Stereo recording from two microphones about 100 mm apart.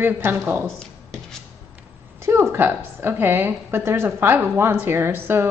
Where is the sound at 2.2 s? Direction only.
25° right (ahead or behind).